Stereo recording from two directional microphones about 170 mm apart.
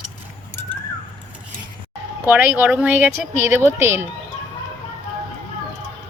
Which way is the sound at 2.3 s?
10° right (ahead or behind).